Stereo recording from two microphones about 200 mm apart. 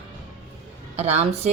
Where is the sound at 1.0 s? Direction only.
35° right (ahead or behind).